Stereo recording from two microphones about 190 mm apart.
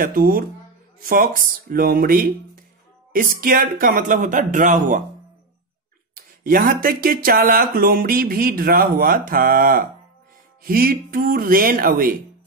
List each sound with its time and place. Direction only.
0.0 s speech: 50° right (ahead or behind)
6.1 s speech: 50° right (ahead or behind)